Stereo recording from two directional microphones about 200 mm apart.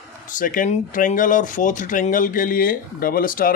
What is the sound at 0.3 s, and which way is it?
Speech, 40° left (ahead or behind).